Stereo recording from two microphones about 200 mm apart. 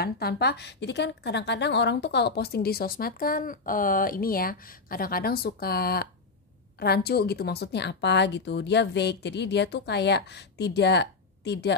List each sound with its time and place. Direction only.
0.0 s a woman's voice: 50° left (ahead or behind)